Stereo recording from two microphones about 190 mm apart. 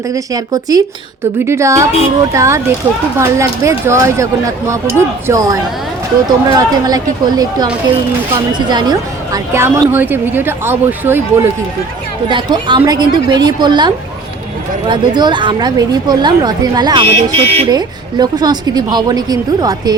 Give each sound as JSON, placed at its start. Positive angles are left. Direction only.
{"t": 0.1, "sound": "speech", "side_deg": -20}
{"t": 12.3, "sound": "speech", "side_deg": -25}